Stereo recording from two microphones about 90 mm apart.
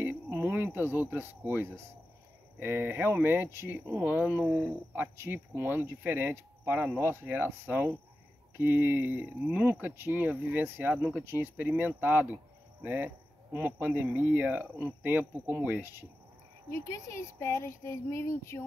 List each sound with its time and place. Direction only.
0.0 s a sound: 25° right (ahead or behind)
0.7 s speech: 25° right (ahead or behind)
16.8 s speech: 35° left (ahead or behind)